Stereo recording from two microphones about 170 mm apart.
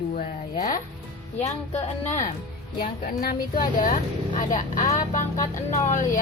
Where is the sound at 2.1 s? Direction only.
45° left (ahead or behind).